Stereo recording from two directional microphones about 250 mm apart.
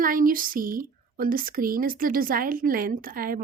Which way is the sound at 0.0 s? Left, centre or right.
Right.